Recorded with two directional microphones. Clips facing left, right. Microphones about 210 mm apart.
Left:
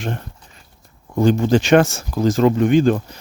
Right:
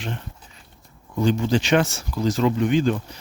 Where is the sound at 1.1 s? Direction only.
45° left (ahead or behind).